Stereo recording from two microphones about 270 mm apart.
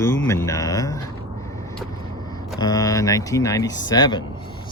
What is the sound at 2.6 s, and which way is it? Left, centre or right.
Speech, centre.